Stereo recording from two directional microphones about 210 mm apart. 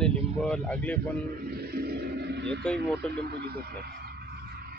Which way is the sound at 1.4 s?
50° right (ahead or behind).